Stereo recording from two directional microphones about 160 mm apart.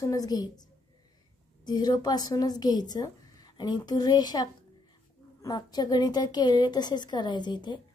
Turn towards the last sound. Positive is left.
turn(degrees=30)  # may be behind; listen again after turning